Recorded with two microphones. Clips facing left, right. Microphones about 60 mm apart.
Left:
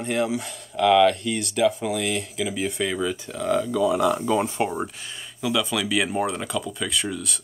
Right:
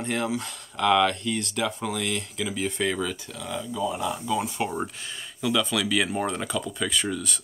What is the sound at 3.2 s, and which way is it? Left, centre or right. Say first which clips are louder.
Speech: left 9 dB; left.